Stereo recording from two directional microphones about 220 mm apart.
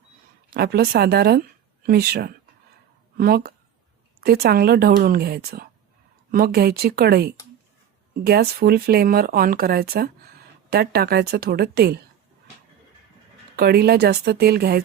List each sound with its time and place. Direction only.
0.5 s speech: 45° right (ahead or behind)
13.6 s speech: 45° right (ahead or behind)